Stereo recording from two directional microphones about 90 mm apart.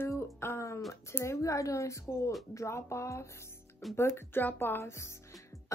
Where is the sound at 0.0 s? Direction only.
30° left (ahead or behind).